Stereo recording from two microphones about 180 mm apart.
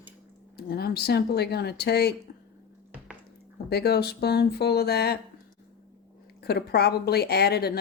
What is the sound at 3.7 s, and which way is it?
A woman's voice, 60° left (ahead or behind).